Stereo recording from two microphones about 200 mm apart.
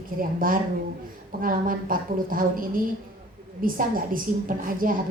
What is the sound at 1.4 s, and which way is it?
A woman's voice, 45° right (ahead or behind).